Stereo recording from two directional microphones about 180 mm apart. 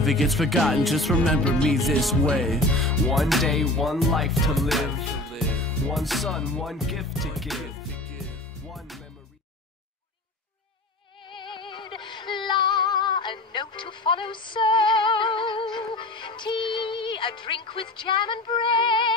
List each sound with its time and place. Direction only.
0.0 s speech: centre (ahead or behind)
8.7 s music: centre (ahead or behind)
11.2 s music: 25° left (ahead or behind)